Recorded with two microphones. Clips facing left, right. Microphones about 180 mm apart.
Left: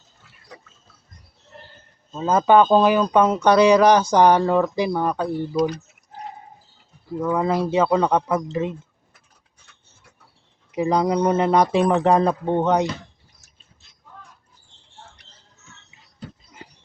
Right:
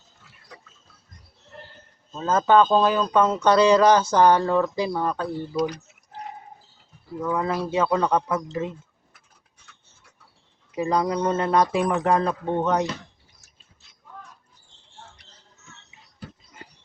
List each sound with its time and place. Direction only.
2.1 s speech: 15° left (ahead or behind)
7.2 s speech: 25° left (ahead or behind)
10.7 s speech: 20° left (ahead or behind)